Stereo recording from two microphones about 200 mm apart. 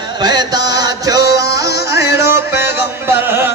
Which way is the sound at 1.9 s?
55° left (ahead or behind).